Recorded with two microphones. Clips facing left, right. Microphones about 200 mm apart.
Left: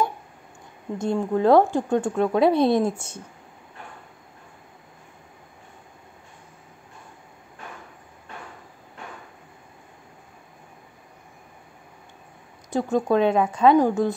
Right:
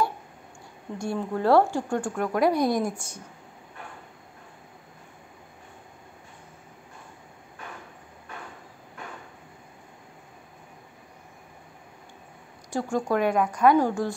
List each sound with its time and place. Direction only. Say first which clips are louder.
0.9 s speech: left 6 dB; 15° left (ahead or behind)
12.6 s speech: left 4 dB; 20° left (ahead or behind)